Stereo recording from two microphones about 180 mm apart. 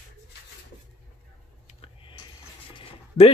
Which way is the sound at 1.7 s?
30° left (ahead or behind).